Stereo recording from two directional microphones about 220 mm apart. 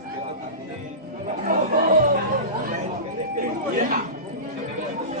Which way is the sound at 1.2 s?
40° right (ahead or behind).